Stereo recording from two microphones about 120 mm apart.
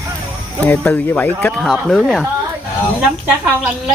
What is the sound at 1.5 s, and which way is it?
Speech, centre (ahead or behind).